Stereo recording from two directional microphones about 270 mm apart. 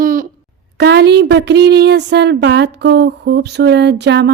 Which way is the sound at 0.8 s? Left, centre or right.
Right.